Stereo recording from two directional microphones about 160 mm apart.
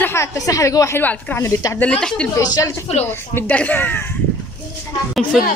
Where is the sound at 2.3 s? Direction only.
20° left (ahead or behind).